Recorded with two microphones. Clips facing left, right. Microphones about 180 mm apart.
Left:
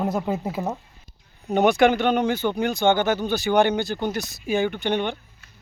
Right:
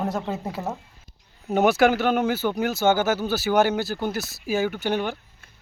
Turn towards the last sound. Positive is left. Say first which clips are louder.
# left 1 dB
turn(degrees=-5)  # may be behind; listen again after turning